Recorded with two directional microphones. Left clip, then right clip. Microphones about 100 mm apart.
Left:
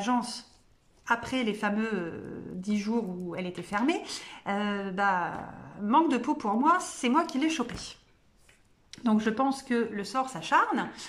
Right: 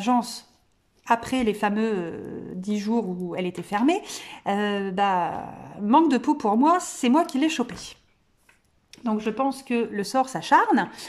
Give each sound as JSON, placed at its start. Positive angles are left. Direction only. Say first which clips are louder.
{"t": 0.0, "sound": "a woman's voice", "louder": "right 6 dB", "side_deg": -45}
{"t": 5.9, "sound": "a woman's voice", "louder": "right 5 dB", "side_deg": -45}
{"t": 8.9, "sound": "speech", "louder": "right 1 dB", "side_deg": -15}
{"t": 9.9, "sound": "speech", "louder": "right 7 dB", "side_deg": -60}